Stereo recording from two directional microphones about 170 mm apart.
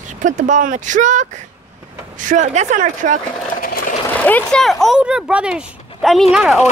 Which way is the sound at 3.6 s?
55° left (ahead or behind).